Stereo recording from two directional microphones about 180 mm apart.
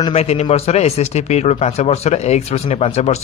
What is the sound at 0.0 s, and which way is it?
A man's voice, 35° left (ahead or behind).